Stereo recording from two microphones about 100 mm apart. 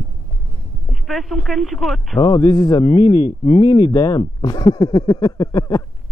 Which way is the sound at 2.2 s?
45° left (ahead or behind).